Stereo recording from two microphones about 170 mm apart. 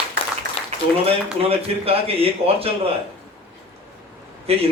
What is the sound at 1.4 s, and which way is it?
A man's voice, 35° right (ahead or behind).